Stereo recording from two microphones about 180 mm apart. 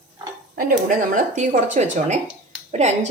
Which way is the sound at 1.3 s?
40° right (ahead or behind).